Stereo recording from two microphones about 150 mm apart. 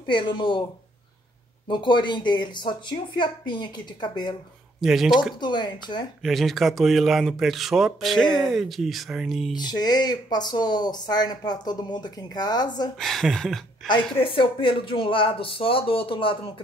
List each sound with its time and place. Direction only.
0.1 s speech: 30° left (ahead or behind)
1.7 s speech: 30° left (ahead or behind)
4.7 s speech: centre (ahead or behind)
5.4 s speech: 30° left (ahead or behind)
6.2 s speech: centre (ahead or behind)
9.6 s speech: 30° left (ahead or behind)
13.0 s speech: centre (ahead or behind)
14.2 s speech: 35° left (ahead or behind)